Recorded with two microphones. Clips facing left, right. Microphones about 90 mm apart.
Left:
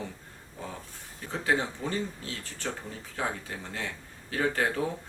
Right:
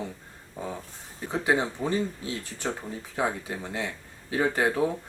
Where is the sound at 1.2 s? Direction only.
15° right (ahead or behind).